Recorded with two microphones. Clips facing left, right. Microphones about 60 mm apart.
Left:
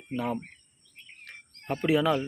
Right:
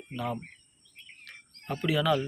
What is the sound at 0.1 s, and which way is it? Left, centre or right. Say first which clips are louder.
Speech: left 3 dB; left.